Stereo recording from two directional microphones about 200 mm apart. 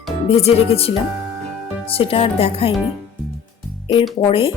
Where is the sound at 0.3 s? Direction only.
30° left (ahead or behind).